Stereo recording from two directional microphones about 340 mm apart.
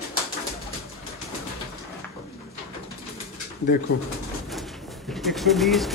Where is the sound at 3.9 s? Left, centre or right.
Left.